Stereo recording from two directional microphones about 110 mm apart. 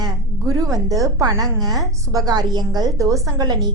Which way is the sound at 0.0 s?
30° right (ahead or behind).